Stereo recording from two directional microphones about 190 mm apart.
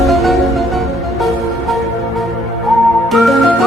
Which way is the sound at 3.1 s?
Centre (ahead or behind).